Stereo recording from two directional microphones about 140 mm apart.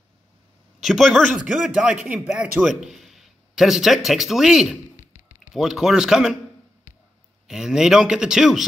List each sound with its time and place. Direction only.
0.7 s a man's voice: centre (ahead or behind)
5.0 s a sound: 65° left (ahead or behind)
5.5 s a man's voice: 5° right (ahead or behind)
7.4 s a man's voice: 5° right (ahead or behind)